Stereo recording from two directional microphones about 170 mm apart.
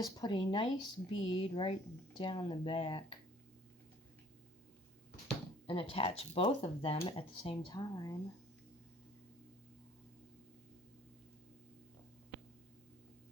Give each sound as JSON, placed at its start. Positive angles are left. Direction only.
{"t": 0.2, "sound": "speech", "side_deg": 25}
{"t": 5.6, "sound": "speech", "side_deg": 30}